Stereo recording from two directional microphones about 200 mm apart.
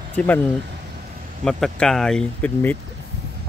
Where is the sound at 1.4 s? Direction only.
Centre (ahead or behind).